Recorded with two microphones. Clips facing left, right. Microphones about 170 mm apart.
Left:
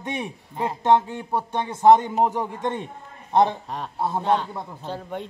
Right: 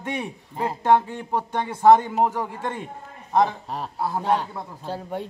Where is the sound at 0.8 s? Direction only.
20° left (ahead or behind).